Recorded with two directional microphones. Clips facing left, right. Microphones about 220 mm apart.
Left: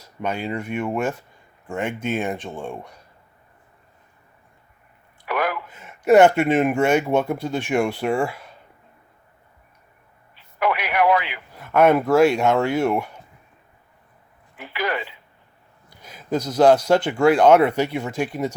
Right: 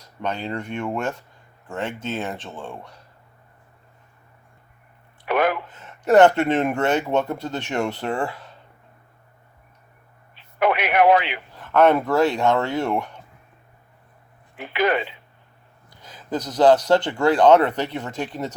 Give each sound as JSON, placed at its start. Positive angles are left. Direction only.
{"t": 0.2, "sound": "speech", "side_deg": 10}
{"t": 5.2, "sound": "a sound", "side_deg": -25}
{"t": 5.6, "sound": "speech", "side_deg": 10}
{"t": 10.3, "sound": "radio", "side_deg": -25}
{"t": 11.5, "sound": "speech", "side_deg": 10}
{"t": 14.6, "sound": "speech", "side_deg": -20}
{"t": 16.0, "sound": "speech", "side_deg": 10}